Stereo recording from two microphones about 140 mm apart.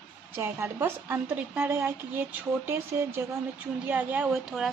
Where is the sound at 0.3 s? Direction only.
20° right (ahead or behind).